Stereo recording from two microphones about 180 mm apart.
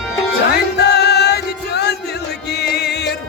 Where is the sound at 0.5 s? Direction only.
65° left (ahead or behind).